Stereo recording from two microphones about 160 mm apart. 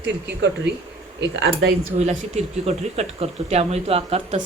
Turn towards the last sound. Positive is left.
turn(degrees=-40)  # may be behind; listen again after turning